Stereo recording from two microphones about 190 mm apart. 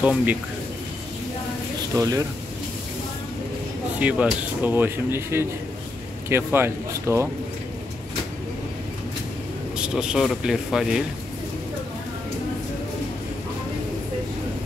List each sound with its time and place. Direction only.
0.0 s speech: 5° right (ahead or behind)
2.0 s speech: 15° right (ahead or behind)
4.0 s speech: 10° right (ahead or behind)
9.8 s speech: 5° right (ahead or behind)